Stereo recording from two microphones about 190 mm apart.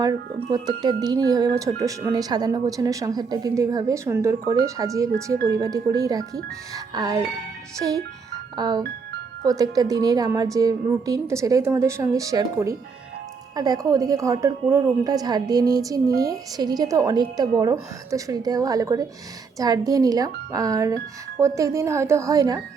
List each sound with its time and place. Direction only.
0.3 s a woman's voice: 25° right (ahead or behind)
8.5 s a woman's voice: 20° right (ahead or behind)